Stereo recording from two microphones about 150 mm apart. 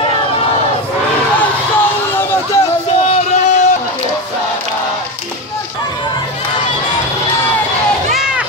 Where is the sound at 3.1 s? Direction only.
55° left (ahead or behind).